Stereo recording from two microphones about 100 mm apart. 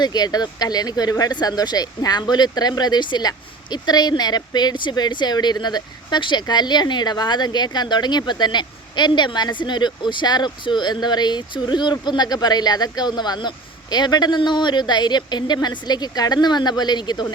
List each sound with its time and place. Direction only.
0.0 s speech: 45° left (ahead or behind)